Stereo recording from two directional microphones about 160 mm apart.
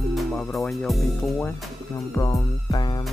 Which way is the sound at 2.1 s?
20° left (ahead or behind).